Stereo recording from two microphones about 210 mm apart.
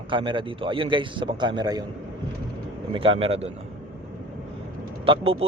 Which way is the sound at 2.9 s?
25° right (ahead or behind).